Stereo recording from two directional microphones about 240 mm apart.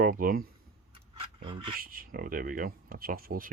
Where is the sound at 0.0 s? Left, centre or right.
Right.